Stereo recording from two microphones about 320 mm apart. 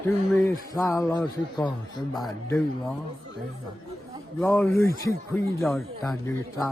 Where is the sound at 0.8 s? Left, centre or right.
Centre.